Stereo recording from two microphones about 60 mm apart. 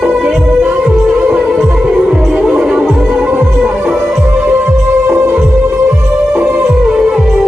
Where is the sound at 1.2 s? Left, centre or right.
Centre.